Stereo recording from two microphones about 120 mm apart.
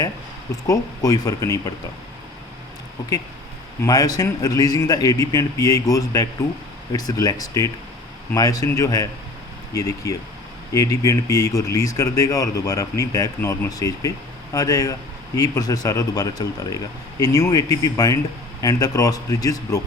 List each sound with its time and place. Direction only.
0.7 s speech: 30° left (ahead or behind)
3.8 s speech: 30° left (ahead or behind)